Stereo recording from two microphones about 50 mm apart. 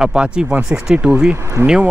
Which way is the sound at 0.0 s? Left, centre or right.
Centre.